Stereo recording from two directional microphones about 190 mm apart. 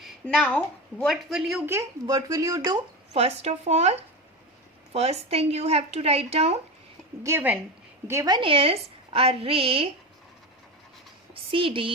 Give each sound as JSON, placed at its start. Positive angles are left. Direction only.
{"t": 0.0, "sound": "a woman's voice", "side_deg": 5}
{"t": 3.1, "sound": "a woman's voice", "side_deg": -35}
{"t": 7.2, "sound": "a woman's voice", "side_deg": -15}
{"t": 11.5, "sound": "a woman's voice", "side_deg": -30}